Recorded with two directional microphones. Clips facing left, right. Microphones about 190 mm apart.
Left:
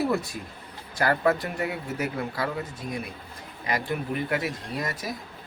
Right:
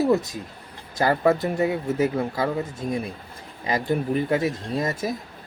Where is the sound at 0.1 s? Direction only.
20° right (ahead or behind).